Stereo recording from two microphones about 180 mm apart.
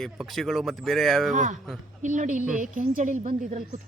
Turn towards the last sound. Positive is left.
turn(degrees=-45)  # may be behind; listen again after turning